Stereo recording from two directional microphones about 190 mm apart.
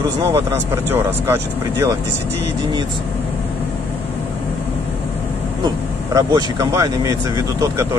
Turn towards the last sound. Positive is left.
turn(degrees=-15)  # may be behind; listen again after turning